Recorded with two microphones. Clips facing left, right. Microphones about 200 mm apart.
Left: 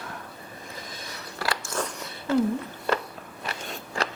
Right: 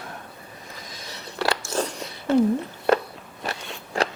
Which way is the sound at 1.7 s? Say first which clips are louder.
Right 4 dB; 30° right (ahead or behind).